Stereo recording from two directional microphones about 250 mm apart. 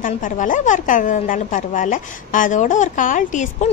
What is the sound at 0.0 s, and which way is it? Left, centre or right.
A woman's voice, left.